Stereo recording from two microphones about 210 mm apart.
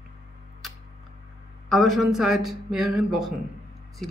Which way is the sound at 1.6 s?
Centre (ahead or behind).